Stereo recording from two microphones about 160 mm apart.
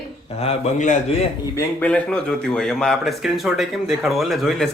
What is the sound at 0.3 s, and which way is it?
Speech, 40° left (ahead or behind).